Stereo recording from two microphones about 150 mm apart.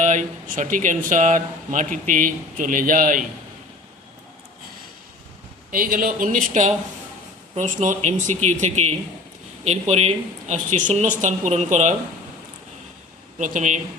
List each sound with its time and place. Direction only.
0.0 s speech: 55° right (ahead or behind)
5.7 s a woman's voice: 70° right (ahead or behind); by 11.9 s 50° right (ahead or behind)
13.4 s speech: 55° right (ahead or behind)